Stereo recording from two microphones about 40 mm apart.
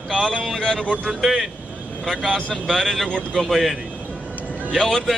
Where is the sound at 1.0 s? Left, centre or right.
Centre.